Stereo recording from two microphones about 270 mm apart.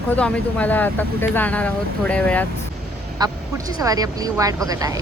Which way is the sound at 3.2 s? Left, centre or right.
Centre.